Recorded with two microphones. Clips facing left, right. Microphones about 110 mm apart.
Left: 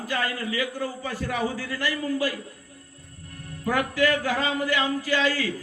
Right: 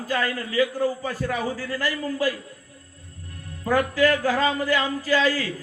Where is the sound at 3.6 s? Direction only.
40° right (ahead or behind).